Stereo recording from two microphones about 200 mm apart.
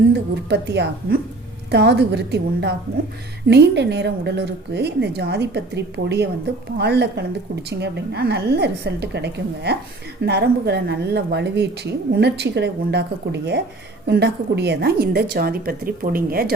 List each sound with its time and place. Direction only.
0.1 s a woman's voice: 55° right (ahead or behind)